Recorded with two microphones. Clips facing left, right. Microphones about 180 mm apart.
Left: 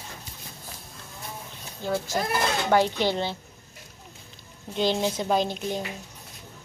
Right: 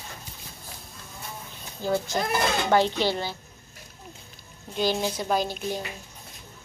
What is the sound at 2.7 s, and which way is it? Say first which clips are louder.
Speech: left 1 dB; 15° left (ahead or behind).